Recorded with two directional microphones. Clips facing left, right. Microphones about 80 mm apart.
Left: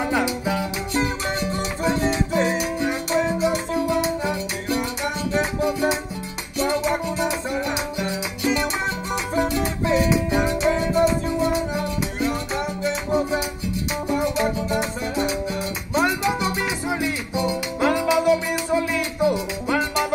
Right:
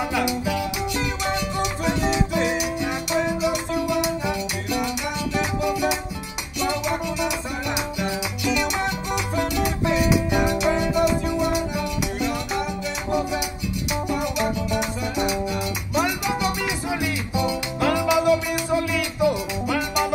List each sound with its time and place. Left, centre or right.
0.1 s music: left
9.3 s music: left